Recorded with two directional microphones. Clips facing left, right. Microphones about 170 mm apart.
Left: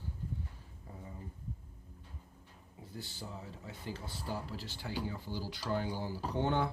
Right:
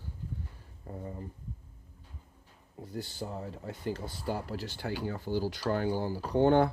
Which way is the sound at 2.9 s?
50° right (ahead or behind).